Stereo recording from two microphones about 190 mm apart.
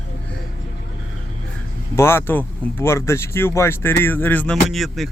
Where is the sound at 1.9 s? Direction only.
10° left (ahead or behind).